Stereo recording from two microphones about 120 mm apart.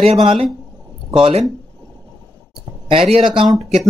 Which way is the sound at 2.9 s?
50° right (ahead or behind).